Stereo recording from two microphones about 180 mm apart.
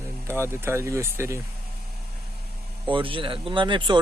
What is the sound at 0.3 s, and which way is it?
Speech, 15° right (ahead or behind).